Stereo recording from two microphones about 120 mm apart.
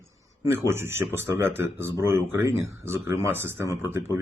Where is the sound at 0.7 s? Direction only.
20° right (ahead or behind).